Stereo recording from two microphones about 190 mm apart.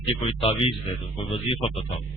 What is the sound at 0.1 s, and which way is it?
Speech, 30° left (ahead or behind).